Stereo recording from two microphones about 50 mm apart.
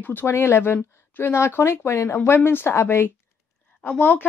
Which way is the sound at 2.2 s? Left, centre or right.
Left.